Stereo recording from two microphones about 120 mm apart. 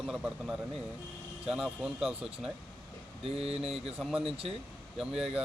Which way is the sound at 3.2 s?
55° right (ahead or behind).